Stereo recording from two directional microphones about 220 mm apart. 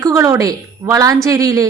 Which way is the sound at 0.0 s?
15° right (ahead or behind).